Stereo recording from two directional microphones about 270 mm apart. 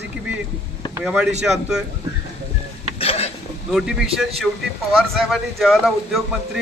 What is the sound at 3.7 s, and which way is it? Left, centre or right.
Speech, centre.